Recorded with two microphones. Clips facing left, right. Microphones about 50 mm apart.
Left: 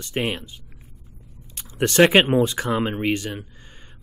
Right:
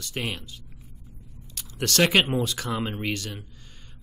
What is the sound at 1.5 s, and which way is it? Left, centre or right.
Speech, left.